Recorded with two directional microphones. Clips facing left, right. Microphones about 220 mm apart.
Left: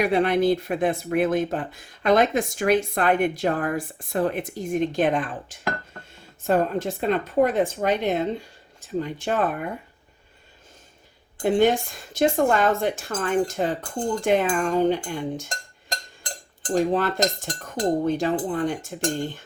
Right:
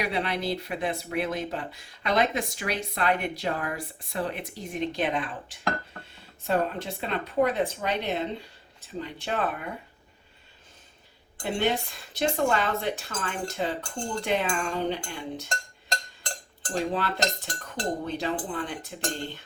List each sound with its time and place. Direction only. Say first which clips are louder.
0.0 s speech: left 9 dB; 50° left (ahead or behind)
11.4 s speech: left 8 dB; 50° left (ahead or behind)
16.9 s speech: left 6 dB; 45° left (ahead or behind)